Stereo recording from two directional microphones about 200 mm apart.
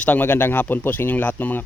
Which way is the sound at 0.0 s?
10° left (ahead or behind).